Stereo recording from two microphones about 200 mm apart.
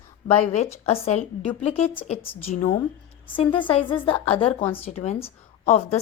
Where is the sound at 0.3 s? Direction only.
30° left (ahead or behind).